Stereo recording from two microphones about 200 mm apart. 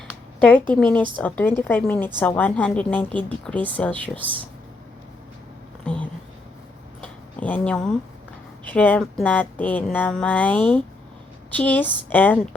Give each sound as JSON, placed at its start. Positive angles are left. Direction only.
{"t": 0.3, "sound": "a woman's voice", "side_deg": 5}
{"t": 4.1, "sound": "speech", "side_deg": -25}
{"t": 5.8, "sound": "a sound", "side_deg": 5}
{"t": 8.6, "sound": "a woman's voice", "side_deg": 10}